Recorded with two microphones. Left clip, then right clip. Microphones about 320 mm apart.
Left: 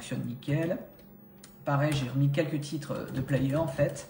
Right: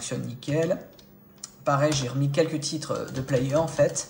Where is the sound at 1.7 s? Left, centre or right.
Centre.